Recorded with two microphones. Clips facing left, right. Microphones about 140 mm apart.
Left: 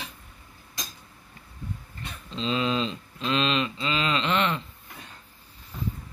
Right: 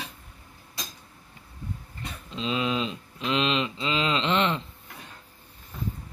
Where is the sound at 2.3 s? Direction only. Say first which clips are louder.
Left 1 dB; 10° right (ahead or behind); by 4.6 s 25° right (ahead or behind).